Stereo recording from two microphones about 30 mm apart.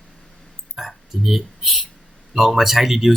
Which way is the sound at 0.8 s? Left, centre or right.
Centre.